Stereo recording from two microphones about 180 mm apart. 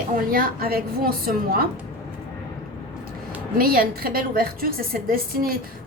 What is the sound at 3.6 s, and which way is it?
A woman's voice, 55° right (ahead or behind).